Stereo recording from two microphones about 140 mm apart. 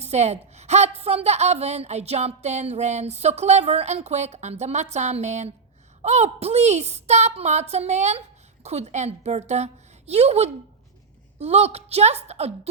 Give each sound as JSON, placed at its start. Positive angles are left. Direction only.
{"t": 0.0, "sound": "a woman's voice", "side_deg": -50}